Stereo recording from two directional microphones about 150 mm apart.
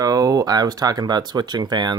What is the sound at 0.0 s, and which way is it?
Speech, 25° right (ahead or behind).